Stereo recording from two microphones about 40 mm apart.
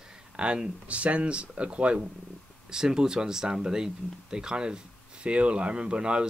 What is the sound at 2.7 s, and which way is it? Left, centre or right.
Speech, centre.